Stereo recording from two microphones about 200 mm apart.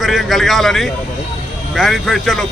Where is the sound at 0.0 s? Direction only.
Centre (ahead or behind).